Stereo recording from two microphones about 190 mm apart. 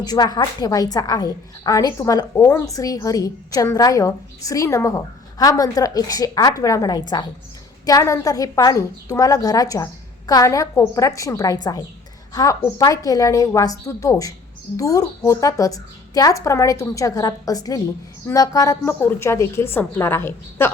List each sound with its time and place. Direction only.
0.0 s a woman's voice: 20° left (ahead or behind)